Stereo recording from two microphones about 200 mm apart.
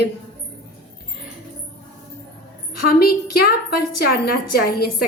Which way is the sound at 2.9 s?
50° left (ahead or behind).